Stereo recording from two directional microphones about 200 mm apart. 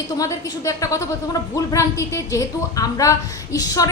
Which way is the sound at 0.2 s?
15° left (ahead or behind).